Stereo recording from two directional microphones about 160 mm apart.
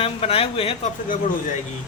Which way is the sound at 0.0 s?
35° left (ahead or behind).